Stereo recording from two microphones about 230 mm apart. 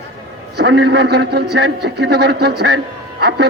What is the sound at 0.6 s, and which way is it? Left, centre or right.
A man's voice, right.